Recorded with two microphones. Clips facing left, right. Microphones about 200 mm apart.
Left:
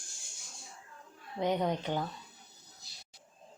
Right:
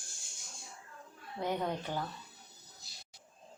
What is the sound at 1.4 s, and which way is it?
Speech, 20° left (ahead or behind).